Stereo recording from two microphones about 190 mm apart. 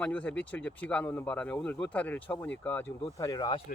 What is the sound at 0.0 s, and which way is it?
Speech, 5° left (ahead or behind).